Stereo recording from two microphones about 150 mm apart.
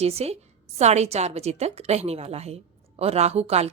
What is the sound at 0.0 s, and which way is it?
A woman's voice, 45° right (ahead or behind).